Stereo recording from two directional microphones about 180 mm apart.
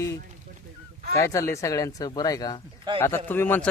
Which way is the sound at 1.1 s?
15° left (ahead or behind).